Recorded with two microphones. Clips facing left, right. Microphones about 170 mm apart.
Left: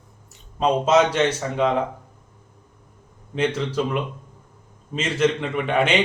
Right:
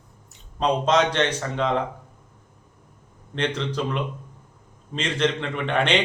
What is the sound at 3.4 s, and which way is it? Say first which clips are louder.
Speech: left 3 dB; 5° left (ahead or behind).